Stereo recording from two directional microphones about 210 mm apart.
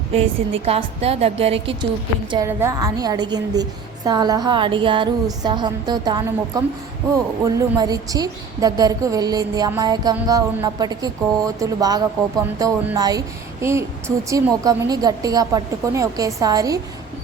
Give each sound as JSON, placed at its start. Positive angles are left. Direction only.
{"t": 0.1, "sound": "a woman's voice", "side_deg": -30}
{"t": 2.3, "sound": "a woman's voice", "side_deg": -15}